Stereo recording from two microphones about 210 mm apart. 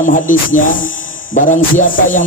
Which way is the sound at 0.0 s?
40° left (ahead or behind).